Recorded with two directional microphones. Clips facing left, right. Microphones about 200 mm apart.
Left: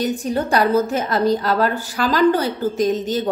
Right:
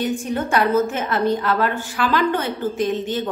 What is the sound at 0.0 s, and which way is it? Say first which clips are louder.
A woman's voice: left 2 dB; 35° left (ahead or behind).